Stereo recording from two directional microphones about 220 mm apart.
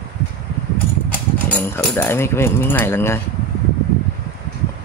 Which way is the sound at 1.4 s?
10° left (ahead or behind).